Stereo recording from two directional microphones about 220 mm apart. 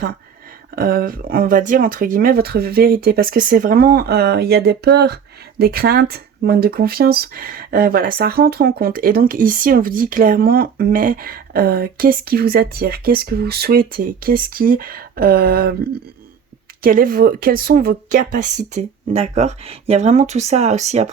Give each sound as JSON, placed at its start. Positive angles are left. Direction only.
{"t": 0.8, "sound": "speech", "side_deg": -40}